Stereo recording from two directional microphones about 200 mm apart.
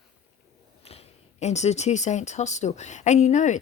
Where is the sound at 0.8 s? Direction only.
30° left (ahead or behind).